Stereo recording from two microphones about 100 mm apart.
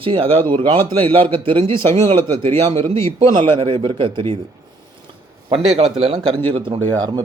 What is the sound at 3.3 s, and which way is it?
A man's voice, 60° right (ahead or behind).